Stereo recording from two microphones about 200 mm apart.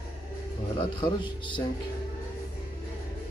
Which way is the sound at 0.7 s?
25° left (ahead or behind).